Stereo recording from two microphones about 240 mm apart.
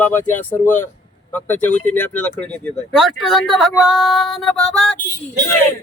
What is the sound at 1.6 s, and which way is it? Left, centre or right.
Speech, left.